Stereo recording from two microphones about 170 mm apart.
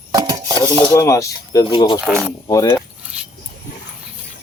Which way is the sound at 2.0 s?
10° right (ahead or behind).